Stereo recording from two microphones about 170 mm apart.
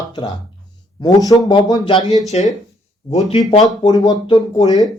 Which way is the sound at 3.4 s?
25° left (ahead or behind).